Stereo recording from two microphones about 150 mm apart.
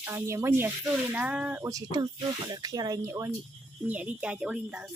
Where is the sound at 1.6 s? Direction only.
25° right (ahead or behind).